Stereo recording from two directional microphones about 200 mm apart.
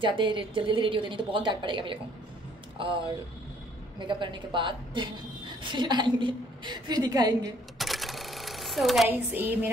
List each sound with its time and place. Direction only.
0.0 s a woman's voice: 25° right (ahead or behind)
7.8 s camera: centre (ahead or behind)